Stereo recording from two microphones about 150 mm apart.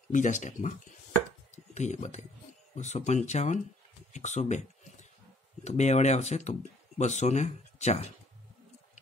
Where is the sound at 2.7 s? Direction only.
50° left (ahead or behind).